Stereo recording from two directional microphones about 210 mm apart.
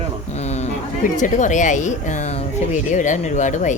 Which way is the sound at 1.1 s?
35° left (ahead or behind).